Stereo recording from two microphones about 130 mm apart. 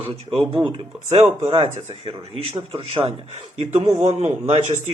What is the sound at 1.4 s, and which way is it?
Speech, 50° right (ahead or behind).